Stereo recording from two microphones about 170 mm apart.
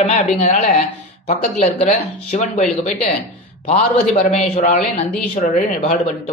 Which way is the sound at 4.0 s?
40° left (ahead or behind).